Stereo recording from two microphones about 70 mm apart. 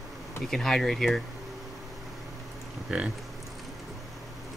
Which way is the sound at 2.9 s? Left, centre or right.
Centre.